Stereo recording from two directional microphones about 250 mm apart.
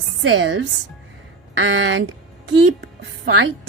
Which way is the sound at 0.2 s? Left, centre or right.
Right.